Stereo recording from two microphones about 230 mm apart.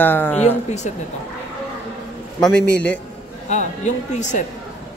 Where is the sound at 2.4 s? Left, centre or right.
Centre.